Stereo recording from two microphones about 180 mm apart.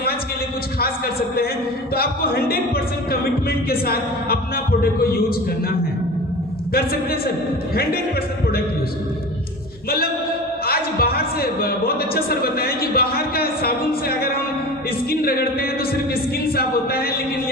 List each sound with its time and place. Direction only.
0.8 s a man's voice: 55° left (ahead or behind)
6.7 s a man's voice: 55° left (ahead or behind)
10.7 s a man's voice: 60° left (ahead or behind)